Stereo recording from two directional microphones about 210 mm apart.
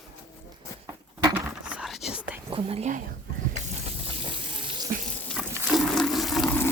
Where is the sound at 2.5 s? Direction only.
25° right (ahead or behind).